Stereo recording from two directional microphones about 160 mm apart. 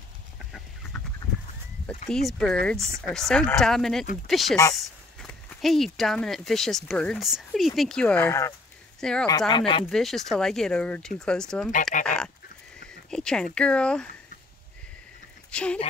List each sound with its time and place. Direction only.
2.0 s speech: centre (ahead or behind)
9.5 s speech: 35° left (ahead or behind)
9.8 s speech: centre (ahead or behind)
15.5 s speech: 5° left (ahead or behind)